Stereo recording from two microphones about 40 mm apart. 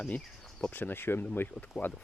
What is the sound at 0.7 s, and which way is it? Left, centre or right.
Speech, left.